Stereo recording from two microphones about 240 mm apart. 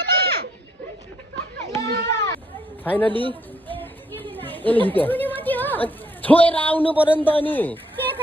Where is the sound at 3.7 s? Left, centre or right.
Centre.